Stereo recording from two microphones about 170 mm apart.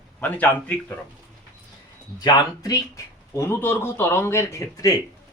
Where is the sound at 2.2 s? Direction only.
25° left (ahead or behind).